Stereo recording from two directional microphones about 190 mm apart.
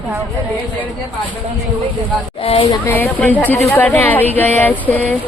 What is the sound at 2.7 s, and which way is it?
Speech, 10° left (ahead or behind).